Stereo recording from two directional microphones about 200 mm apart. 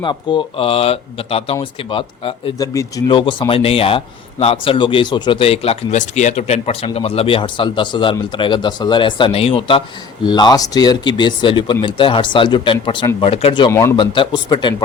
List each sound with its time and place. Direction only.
0.0 s speech: 20° left (ahead or behind)